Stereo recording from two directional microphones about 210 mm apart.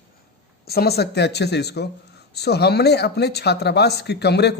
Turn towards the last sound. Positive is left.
turn(degrees=50)  # may be behind; listen again after turning